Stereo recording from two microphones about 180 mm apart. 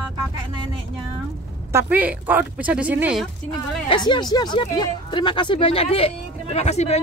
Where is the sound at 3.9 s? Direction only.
25° left (ahead or behind).